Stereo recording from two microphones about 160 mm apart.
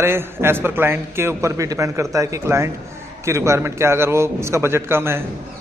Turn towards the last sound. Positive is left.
turn(degrees=-15)  # may be behind; listen again after turning